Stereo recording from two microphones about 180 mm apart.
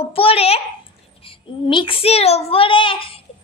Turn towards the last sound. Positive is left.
turn(degrees=30)  # may be behind; listen again after turning